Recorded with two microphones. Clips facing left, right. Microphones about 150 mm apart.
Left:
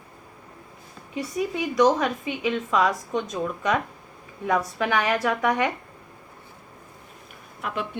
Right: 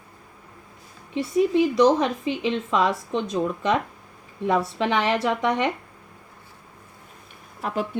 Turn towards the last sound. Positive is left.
turn(degrees=-40)  # may be behind; listen again after turning